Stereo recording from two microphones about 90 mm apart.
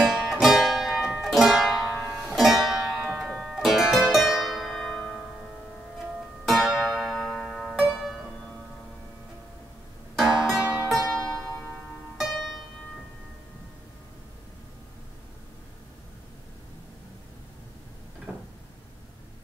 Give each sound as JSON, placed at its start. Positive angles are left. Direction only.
{"t": 0.0, "sound": "music", "side_deg": 0}
{"t": 3.3, "sound": "zither", "side_deg": 0}
{"t": 6.4, "sound": "zither", "side_deg": 0}
{"t": 10.1, "sound": "music", "side_deg": 0}
{"t": 11.0, "sound": "music", "side_deg": -35}
{"t": 12.2, "sound": "music", "side_deg": 0}
{"t": 18.3, "sound": "a sound", "side_deg": -15}